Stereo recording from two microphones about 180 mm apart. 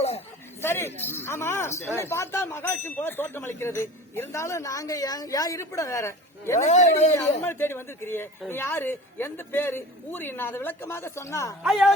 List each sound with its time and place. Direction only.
0.6 s speech: 15° left (ahead or behind)
11.6 s speech: centre (ahead or behind)